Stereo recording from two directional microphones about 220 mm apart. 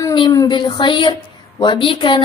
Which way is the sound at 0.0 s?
20° left (ahead or behind).